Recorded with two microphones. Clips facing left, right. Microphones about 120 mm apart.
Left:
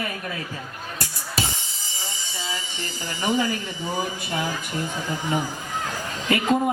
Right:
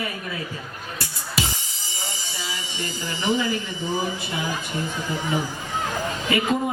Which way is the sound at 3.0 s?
45° left (ahead or behind).